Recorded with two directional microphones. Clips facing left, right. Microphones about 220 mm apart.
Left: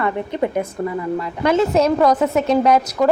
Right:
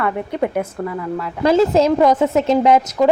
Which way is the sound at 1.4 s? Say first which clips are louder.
Right 2 dB; 30° right (ahead or behind).